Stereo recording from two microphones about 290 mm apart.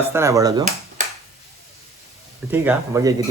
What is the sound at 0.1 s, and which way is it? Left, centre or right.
Speech, centre.